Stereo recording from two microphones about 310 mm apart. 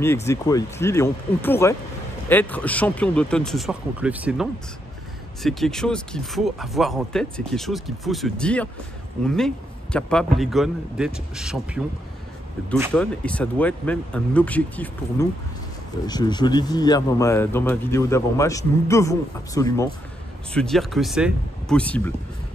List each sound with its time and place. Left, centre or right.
0.0 s speech: centre
9.9 s speech: centre
12.9 s speech: centre